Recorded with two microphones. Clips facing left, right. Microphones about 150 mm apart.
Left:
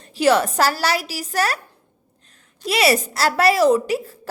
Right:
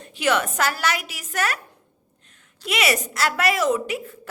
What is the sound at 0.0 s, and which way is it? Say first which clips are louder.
A woman's voice: left 6 dB; 35° left (ahead or behind).